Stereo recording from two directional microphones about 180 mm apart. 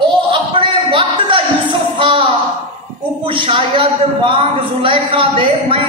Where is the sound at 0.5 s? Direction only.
30° right (ahead or behind).